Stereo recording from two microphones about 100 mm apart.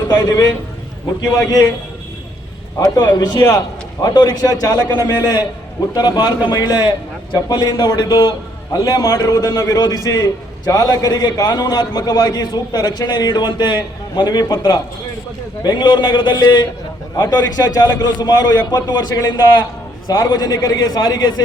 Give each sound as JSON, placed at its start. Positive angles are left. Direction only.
{"t": 0.1, "sound": "a man's voice", "side_deg": 40}
{"t": 2.7, "sound": "a man's voice", "side_deg": 40}
{"t": 15.6, "sound": "a man's voice", "side_deg": 50}